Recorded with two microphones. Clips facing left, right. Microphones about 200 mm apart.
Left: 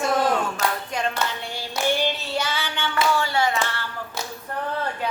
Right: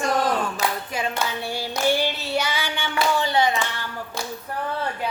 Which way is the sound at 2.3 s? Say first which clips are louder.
Right 1 dB; 10° right (ahead or behind).